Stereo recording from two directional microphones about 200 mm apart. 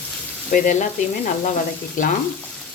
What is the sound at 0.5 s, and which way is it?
Speech, 40° left (ahead or behind).